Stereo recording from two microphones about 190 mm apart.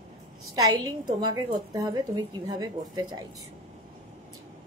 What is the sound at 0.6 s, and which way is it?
A woman's voice, 20° right (ahead or behind).